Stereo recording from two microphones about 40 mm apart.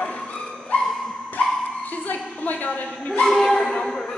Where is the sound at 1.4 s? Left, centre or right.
Left.